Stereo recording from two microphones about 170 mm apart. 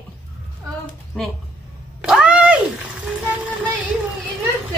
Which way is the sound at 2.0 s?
5° right (ahead or behind).